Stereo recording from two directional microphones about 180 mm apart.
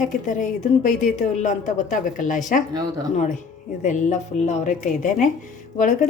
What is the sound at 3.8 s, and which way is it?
A woman's voice, 40° left (ahead or behind).